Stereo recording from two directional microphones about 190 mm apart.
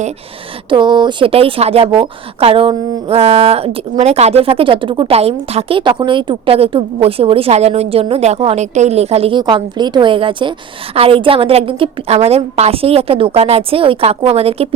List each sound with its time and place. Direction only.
0.7 s speech: 25° right (ahead or behind)